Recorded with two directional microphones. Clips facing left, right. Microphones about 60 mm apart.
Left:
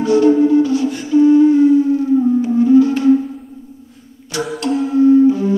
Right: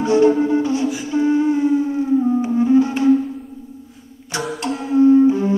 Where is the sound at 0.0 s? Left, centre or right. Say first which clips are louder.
Left 3 dB; right.